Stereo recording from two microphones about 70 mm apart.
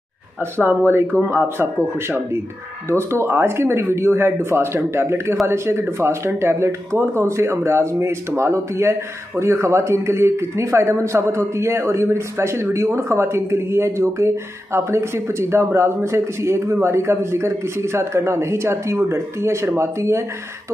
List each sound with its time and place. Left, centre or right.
0.4 s a man's voice: right